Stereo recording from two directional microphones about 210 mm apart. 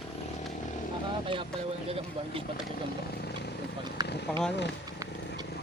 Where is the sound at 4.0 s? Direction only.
20° right (ahead or behind).